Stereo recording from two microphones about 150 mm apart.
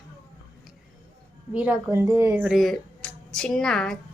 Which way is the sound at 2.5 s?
Centre (ahead or behind).